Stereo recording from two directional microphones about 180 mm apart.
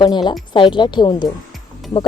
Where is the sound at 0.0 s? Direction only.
25° left (ahead or behind).